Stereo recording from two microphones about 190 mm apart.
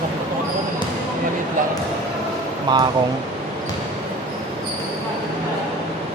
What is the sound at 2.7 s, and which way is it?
Speech, 25° right (ahead or behind).